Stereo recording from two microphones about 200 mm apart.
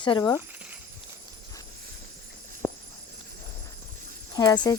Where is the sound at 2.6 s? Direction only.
20° left (ahead or behind).